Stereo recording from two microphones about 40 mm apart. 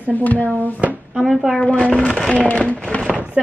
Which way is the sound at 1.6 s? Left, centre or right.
Left.